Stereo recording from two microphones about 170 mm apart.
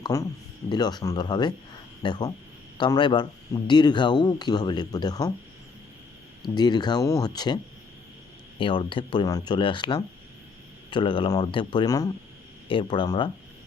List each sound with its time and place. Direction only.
0.0 s speech: 20° left (ahead or behind)
6.4 s speech: 25° left (ahead or behind)